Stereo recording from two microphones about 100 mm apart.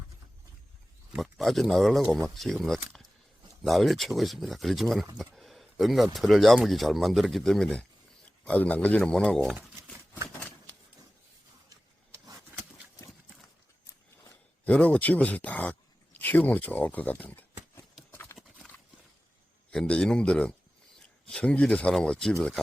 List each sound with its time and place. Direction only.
1.1 s speech: centre (ahead or behind)
12.5 s a sound: 20° right (ahead or behind)
13.1 s horse: centre (ahead or behind)
14.6 s speech: 15° left (ahead or behind)
18.1 s clip-clop: 20° left (ahead or behind)
18.3 s clip-clop: centre (ahead or behind)
19.7 s speech: 10° left (ahead or behind)